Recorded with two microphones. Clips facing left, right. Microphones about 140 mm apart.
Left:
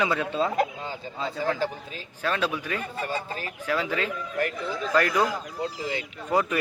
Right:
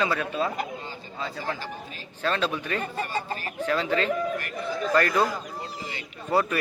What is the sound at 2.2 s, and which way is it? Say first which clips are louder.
A man's voice: right 1 dB; 10° left (ahead or behind).